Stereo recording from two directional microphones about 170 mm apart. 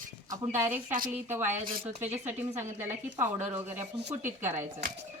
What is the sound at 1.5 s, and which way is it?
Speech, 40° right (ahead or behind).